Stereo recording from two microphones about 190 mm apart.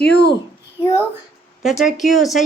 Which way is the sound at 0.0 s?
60° left (ahead or behind).